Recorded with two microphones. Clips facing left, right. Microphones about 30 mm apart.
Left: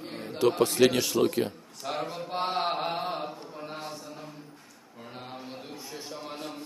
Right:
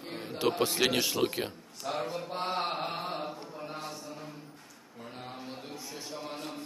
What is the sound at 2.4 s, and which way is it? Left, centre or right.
Mantra, left.